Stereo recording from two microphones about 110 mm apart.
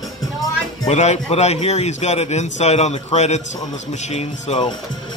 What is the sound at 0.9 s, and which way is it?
A man's voice, 85° left.